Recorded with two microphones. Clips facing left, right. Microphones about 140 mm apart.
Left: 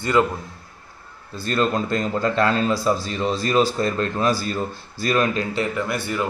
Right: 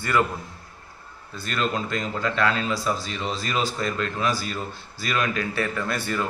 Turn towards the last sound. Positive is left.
turn(degrees=15)  # may be behind; listen again after turning